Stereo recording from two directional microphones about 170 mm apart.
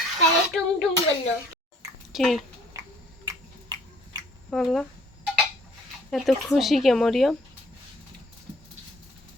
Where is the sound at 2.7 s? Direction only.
20° right (ahead or behind).